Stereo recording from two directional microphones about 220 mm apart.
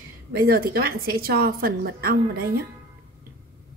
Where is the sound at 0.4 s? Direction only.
45° right (ahead or behind).